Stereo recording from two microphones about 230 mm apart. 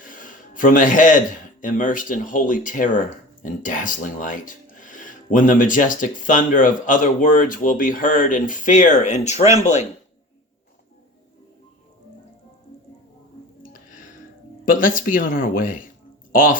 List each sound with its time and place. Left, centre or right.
0.0 s a sound: left
1.6 s speech: left
14.6 s speech: left